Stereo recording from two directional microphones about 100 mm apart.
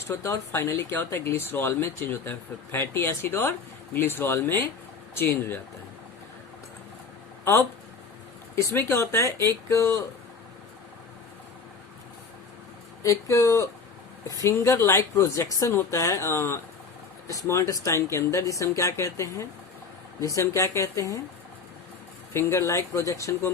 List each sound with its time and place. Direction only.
0.1 s speech: 25° left (ahead or behind)
8.5 s speech: 25° left (ahead or behind)
13.0 s speech: 30° left (ahead or behind)
22.3 s speech: 30° left (ahead or behind)